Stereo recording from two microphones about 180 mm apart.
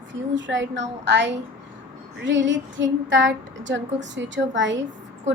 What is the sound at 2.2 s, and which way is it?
A woman's voice, 90° right.